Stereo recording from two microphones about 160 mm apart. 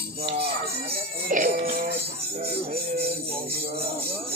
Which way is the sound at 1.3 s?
50° right (ahead or behind).